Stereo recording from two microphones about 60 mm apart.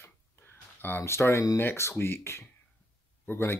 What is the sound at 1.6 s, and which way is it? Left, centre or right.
Speech, left.